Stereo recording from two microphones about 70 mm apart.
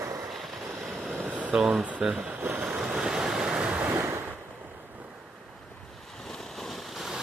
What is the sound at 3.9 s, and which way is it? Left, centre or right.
Waves, right.